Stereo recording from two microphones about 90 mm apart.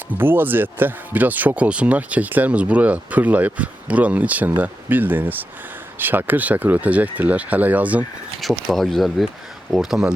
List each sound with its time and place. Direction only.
0.1 s speech: 25° right (ahead or behind)
8.4 s speech: centre (ahead or behind)